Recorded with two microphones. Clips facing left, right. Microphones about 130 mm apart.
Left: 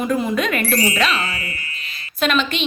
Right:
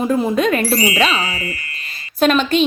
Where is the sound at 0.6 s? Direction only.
10° right (ahead or behind).